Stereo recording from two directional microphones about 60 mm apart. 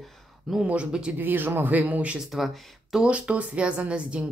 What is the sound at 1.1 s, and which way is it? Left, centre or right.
Speech, right.